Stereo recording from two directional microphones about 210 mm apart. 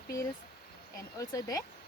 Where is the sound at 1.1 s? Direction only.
15° left (ahead or behind).